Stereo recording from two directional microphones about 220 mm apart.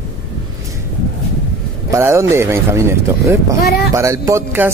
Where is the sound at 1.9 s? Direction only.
10° right (ahead or behind).